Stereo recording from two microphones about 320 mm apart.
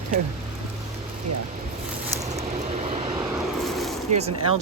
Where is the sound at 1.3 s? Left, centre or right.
Right.